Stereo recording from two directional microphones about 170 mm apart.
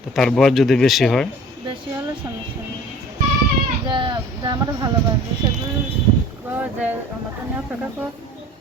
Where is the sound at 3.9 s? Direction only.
30° right (ahead or behind).